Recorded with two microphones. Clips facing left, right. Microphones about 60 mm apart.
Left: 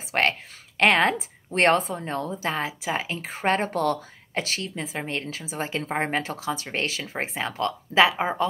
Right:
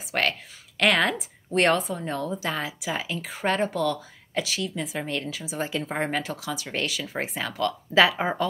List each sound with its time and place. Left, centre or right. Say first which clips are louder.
0.1 s a woman's voice: left 2 dB; left